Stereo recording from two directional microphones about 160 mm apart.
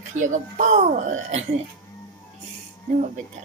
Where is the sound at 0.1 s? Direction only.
50° right (ahead or behind).